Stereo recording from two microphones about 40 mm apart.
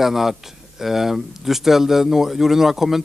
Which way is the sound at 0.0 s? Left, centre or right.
Centre.